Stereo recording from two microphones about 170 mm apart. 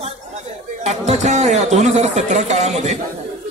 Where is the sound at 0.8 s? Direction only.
40° right (ahead or behind).